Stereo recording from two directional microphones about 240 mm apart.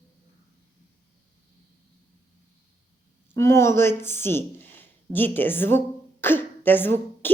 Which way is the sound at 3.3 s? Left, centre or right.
Centre.